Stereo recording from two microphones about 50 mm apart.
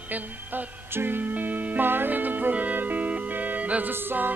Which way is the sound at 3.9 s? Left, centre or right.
Right.